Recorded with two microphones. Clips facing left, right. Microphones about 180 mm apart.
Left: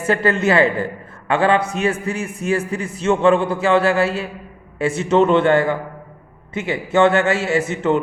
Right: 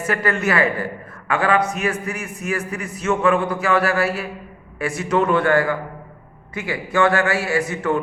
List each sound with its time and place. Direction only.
0.0 s a man's voice: 30° left (ahead or behind)